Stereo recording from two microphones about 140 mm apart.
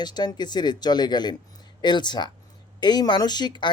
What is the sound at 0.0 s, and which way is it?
Speech, 30° left (ahead or behind).